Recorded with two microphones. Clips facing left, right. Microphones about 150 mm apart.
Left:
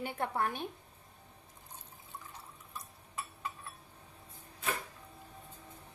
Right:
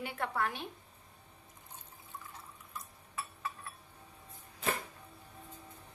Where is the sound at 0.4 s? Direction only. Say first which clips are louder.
Left 1 dB; 50° left (ahead or behind).